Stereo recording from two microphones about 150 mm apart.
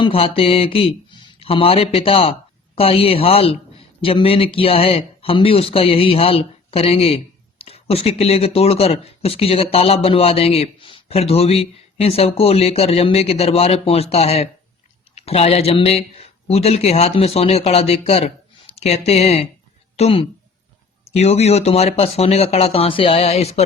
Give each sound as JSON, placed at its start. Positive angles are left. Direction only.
{"t": 0.0, "sound": "speech", "side_deg": 40}